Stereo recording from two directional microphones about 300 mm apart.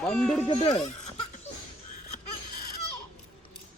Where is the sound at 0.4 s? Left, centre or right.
Centre.